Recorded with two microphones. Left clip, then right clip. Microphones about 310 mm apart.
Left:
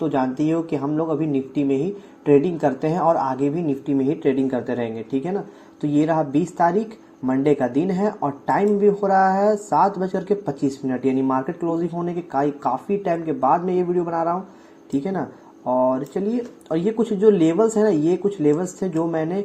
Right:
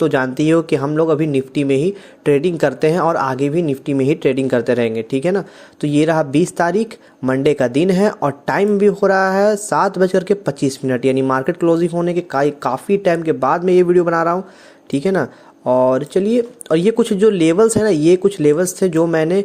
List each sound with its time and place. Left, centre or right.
0.0 s speech: right